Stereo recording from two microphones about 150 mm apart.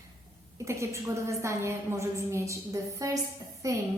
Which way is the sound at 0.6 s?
20° right (ahead or behind).